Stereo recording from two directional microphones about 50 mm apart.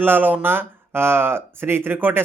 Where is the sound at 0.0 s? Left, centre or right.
Right.